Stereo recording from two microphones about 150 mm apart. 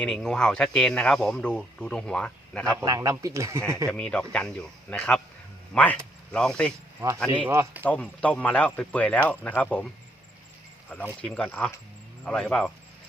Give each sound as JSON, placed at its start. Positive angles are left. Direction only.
{"t": 0.0, "sound": "speech", "side_deg": 5}
{"t": 2.8, "sound": "speech", "side_deg": -25}
{"t": 3.8, "sound": "speech", "side_deg": 5}
{"t": 7.0, "sound": "speech", "side_deg": -20}
{"t": 7.9, "sound": "speech", "side_deg": 10}